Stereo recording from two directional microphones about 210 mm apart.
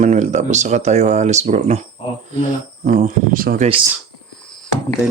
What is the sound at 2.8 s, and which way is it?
Speech, 40° right (ahead or behind).